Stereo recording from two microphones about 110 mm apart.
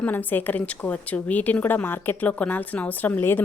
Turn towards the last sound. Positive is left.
turn(degrees=20)  # may be behind; listen again after turning